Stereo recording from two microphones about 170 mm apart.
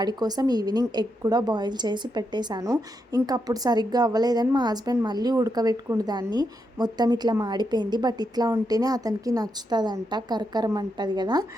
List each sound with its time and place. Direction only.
0.0 s a woman's voice: 25° right (ahead or behind)